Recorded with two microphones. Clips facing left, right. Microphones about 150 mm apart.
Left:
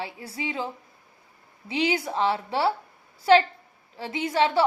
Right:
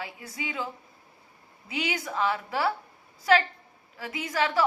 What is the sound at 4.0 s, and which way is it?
Speech, 30° left (ahead or behind).